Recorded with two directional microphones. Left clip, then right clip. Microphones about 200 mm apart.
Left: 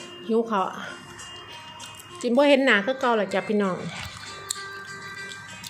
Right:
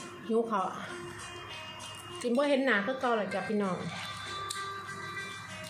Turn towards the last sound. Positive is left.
turn(degrees=40)  # may be behind; listen again after turning